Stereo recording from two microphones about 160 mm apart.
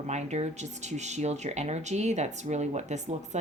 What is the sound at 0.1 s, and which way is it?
Speech, 45° right (ahead or behind).